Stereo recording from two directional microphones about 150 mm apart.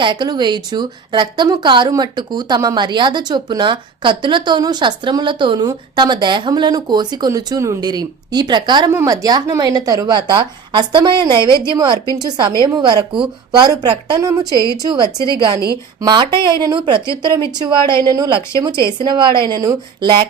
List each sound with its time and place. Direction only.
0.0 s a woman's voice: 30° right (ahead or behind)